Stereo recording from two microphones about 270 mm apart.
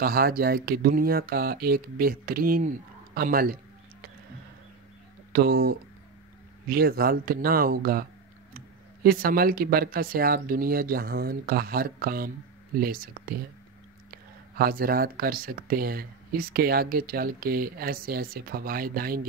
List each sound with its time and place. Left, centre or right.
0.0 s speech: right
5.3 s speech: right